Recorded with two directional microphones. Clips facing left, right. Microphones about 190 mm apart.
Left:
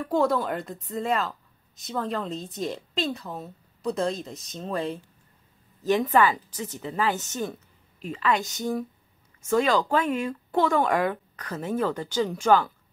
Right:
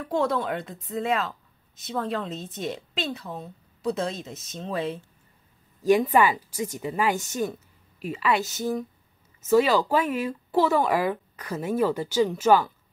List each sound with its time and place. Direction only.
0.0 s a woman's voice: centre (ahead or behind)